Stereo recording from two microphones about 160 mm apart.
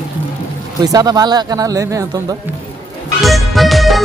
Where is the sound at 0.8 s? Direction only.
25° right (ahead or behind).